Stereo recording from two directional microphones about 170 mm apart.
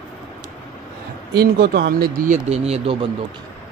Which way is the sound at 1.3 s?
70° right (ahead or behind).